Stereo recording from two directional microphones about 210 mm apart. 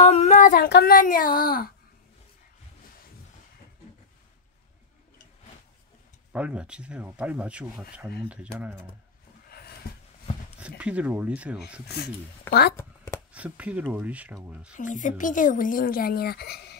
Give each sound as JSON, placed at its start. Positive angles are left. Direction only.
{"t": 0.0, "sound": "child singing", "side_deg": 30}
{"t": 6.3, "sound": "speech", "side_deg": -5}
{"t": 9.5, "sound": "a sound", "side_deg": 45}
{"t": 10.8, "sound": "speech", "side_deg": -5}
{"t": 12.0, "sound": "speech", "side_deg": 50}
{"t": 12.7, "sound": "a sound", "side_deg": 10}
{"t": 13.3, "sound": "speech", "side_deg": -5}
{"t": 14.8, "sound": "a woman's voice", "side_deg": 40}